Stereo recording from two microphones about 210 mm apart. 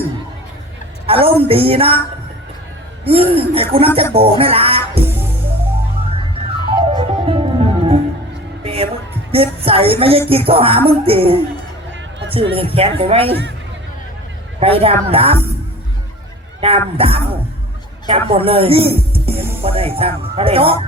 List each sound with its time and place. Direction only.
1.0 s a woman's voice: 25° right (ahead or behind)
3.0 s a sound: 25° right (ahead or behind)
3.8 s speech: 25° right (ahead or behind)
5.0 s music: 10° right (ahead or behind)
6.7 s music: 25° right (ahead or behind)
9.3 s speech: 25° right (ahead or behind)
14.6 s speech: 25° right (ahead or behind)
16.6 s speech: 25° right (ahead or behind)